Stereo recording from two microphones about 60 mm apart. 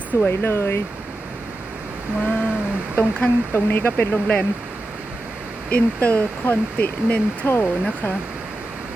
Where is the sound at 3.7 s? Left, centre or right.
Left.